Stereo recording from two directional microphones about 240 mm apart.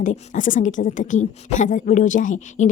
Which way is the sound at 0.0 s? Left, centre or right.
Left.